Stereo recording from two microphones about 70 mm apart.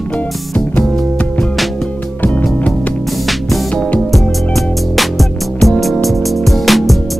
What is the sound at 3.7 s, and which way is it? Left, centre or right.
Music, centre.